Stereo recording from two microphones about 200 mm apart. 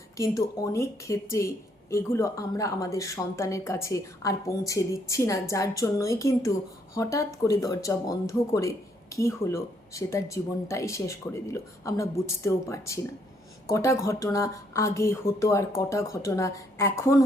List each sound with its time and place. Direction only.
0.2 s speech: 15° left (ahead or behind)